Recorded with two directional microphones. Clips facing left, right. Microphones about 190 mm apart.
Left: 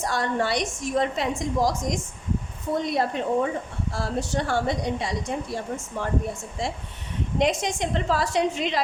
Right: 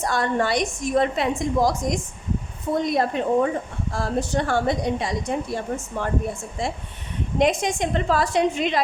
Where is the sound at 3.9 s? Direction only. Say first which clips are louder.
Right 3 dB; 55° right (ahead or behind).